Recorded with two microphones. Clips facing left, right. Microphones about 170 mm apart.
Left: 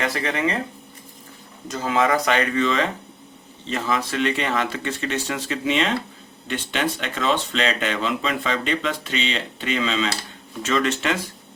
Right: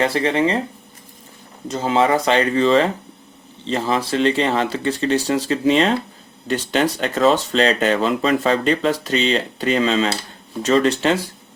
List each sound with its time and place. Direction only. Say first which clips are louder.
0.0 s speech: right 6 dB; 30° right (ahead or behind)
1.6 s speech: right 4 dB; 30° right (ahead or behind)